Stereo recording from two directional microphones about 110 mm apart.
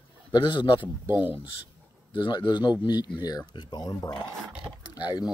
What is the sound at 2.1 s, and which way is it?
Speech, 45° left (ahead or behind).